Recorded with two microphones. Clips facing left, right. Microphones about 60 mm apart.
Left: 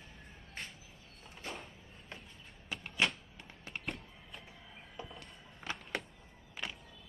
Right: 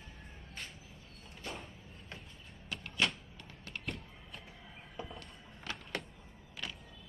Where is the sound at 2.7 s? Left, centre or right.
Centre.